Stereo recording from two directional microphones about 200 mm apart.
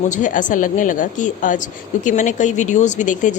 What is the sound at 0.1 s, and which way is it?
Speech, 40° left (ahead or behind).